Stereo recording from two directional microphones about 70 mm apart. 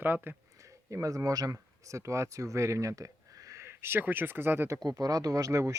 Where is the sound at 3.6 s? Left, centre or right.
Right.